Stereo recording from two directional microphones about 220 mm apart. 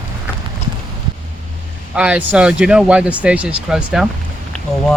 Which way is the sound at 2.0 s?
5° right (ahead or behind).